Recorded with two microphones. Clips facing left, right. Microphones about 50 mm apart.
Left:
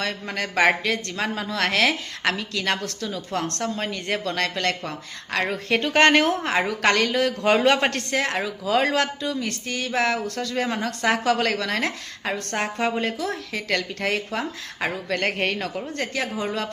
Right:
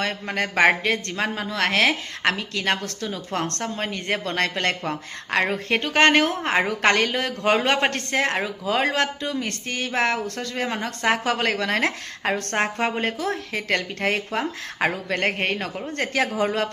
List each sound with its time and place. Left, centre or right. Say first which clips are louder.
0.0 s a woman's voice: right 2 dB; right
4.2 s speech: right 1 dB; right
6.0 s a man's voice: even; centre
6.4 s a woman's voice: right 1 dB; right
9.2 s speech: even; right
10.5 s a woman's voice: left 2 dB; centre
11.8 s a woman's voice: right 3 dB; right; by 15.7 s centre
15.9 s speech: right 3 dB; right